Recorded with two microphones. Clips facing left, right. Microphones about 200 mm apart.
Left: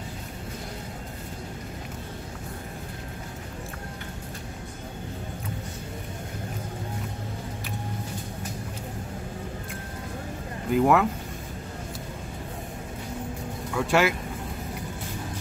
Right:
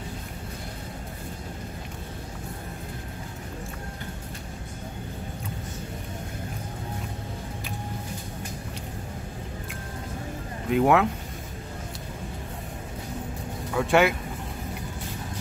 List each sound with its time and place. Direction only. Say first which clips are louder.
10.7 s speech: even; centre (ahead or behind)
13.7 s speech: right 2 dB; centre (ahead or behind)